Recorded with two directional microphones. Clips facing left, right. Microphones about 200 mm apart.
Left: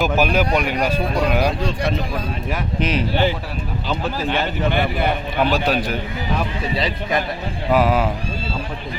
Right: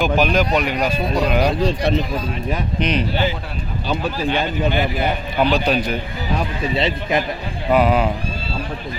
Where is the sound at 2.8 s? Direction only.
5° left (ahead or behind).